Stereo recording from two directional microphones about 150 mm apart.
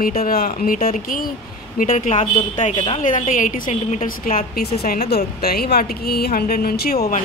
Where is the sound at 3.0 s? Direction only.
60° left (ahead or behind).